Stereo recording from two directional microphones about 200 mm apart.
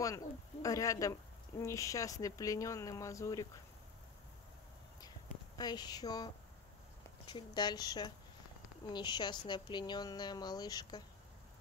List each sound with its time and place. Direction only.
0.0 s speech: 15° left (ahead or behind)
5.6 s speech: 20° left (ahead or behind)